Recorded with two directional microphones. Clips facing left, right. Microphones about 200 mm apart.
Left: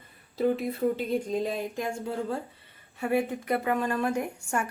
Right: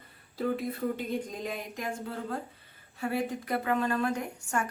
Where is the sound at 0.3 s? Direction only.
25° left (ahead or behind).